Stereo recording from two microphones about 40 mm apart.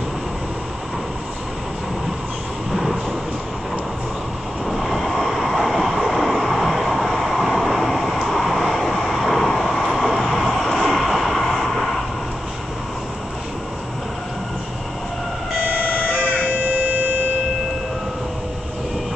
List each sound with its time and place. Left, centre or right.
2.7 s vehicle: centre
4.6 s vehicle: centre
15.6 s siren: right